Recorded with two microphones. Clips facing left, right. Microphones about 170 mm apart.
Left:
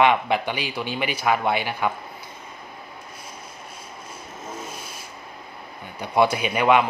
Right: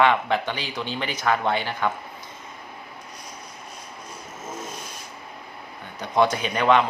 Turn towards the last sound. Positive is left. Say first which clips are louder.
# left 1 dB
turn(degrees=10)  # may be behind; listen again after turning